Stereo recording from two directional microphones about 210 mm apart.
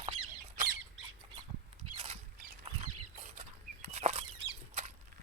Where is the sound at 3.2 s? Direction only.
35° right (ahead or behind).